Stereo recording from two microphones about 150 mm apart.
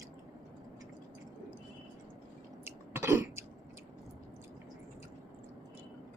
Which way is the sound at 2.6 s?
15° right (ahead or behind).